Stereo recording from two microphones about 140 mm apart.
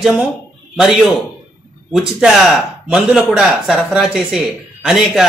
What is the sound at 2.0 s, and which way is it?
A man's voice, 5° right (ahead or behind).